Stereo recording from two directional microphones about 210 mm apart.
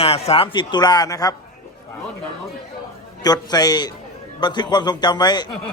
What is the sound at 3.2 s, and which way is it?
A man's voice, 20° left (ahead or behind).